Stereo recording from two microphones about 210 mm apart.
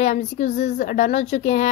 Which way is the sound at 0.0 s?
35° left (ahead or behind).